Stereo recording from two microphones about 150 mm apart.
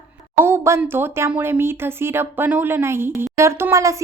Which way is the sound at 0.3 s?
15° right (ahead or behind).